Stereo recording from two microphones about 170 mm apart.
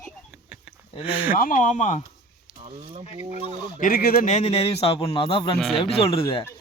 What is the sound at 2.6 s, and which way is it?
Speech, 35° right (ahead or behind).